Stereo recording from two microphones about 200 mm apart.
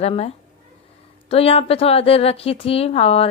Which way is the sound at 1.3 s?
30° left (ahead or behind).